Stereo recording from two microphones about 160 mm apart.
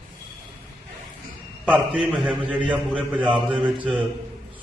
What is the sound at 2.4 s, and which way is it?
A man's voice, 10° right (ahead or behind).